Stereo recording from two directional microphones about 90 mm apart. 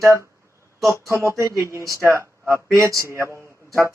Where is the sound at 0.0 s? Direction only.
35° right (ahead or behind).